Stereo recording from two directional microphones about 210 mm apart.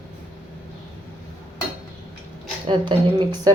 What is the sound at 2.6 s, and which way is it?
Speech, 25° right (ahead or behind).